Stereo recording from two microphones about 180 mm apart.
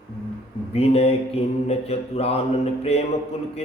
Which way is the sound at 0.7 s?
35° left (ahead or behind).